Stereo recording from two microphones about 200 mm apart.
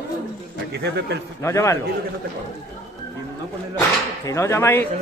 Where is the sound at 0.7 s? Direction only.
55° right (ahead or behind).